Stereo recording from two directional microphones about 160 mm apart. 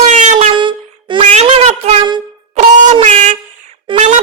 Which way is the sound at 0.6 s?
30° right (ahead or behind).